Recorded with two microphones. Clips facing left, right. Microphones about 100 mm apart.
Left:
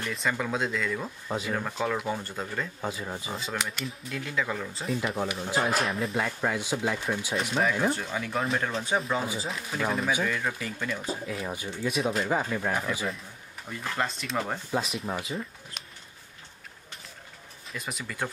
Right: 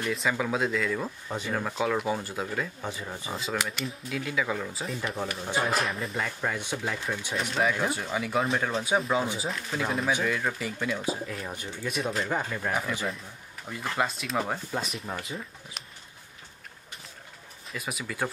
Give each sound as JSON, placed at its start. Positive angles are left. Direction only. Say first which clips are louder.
{"t": 0.1, "sound": "speech", "louder": "right 1 dB", "side_deg": 0}
{"t": 2.8, "sound": "speech", "louder": "left 2 dB", "side_deg": 5}
{"t": 11.2, "sound": "speech", "louder": "left 3 dB", "side_deg": 5}
{"t": 17.6, "sound": "speech", "louder": "right 2 dB", "side_deg": -5}